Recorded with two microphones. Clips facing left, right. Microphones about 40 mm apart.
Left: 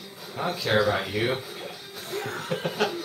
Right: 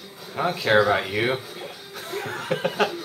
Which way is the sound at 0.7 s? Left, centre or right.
Centre.